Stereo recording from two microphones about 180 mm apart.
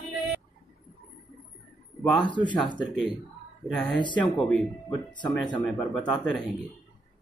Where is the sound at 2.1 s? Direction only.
25° left (ahead or behind).